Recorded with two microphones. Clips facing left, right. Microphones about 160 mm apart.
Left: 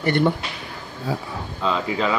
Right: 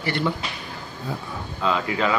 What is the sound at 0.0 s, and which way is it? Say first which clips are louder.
Speech: left 6 dB; 50° left (ahead or behind).